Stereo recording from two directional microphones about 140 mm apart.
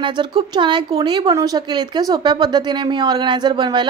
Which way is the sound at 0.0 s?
35° right (ahead or behind).